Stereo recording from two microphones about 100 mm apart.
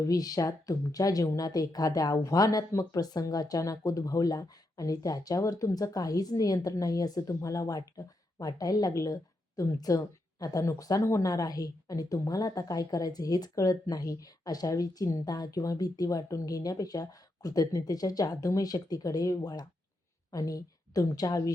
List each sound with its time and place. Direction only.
0.0 s a woman's voice: 40° left (ahead or behind)